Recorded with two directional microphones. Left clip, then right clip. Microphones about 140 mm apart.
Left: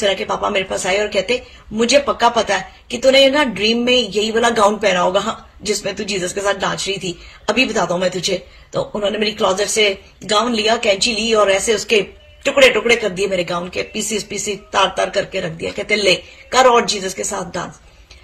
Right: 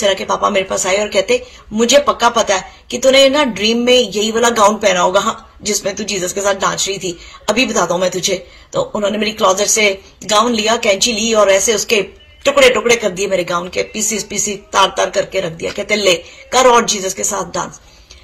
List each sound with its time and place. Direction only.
0.0 s speech: 25° left (ahead or behind)